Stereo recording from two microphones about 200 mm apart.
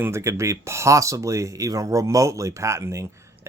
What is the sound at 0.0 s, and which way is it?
Speech, 15° right (ahead or behind).